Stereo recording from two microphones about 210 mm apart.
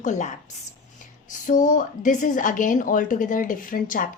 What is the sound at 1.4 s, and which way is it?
A woman's voice, 40° left (ahead or behind).